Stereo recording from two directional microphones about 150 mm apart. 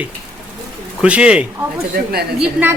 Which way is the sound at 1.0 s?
10° right (ahead or behind).